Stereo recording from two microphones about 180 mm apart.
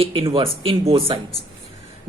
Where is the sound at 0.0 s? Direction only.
30° right (ahead or behind).